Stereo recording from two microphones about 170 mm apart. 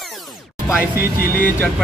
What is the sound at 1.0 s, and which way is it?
Speech, 60° left (ahead or behind).